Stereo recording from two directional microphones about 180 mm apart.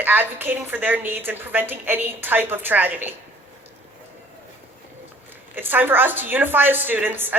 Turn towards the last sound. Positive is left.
turn(degrees=-10)  # may be behind; listen again after turning